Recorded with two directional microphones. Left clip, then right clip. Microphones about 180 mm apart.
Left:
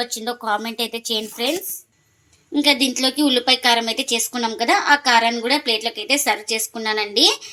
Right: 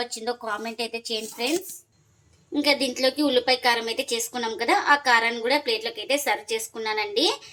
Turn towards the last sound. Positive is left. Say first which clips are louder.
# left 6 dB
turn(degrees=40)  # may be behind; listen again after turning